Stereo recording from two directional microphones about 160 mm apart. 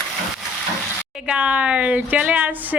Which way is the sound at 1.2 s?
5° right (ahead or behind).